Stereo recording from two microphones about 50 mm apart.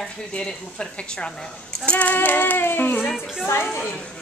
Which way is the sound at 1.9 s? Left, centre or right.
Left.